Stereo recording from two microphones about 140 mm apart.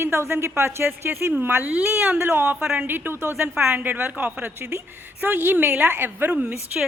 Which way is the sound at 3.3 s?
5° right (ahead or behind).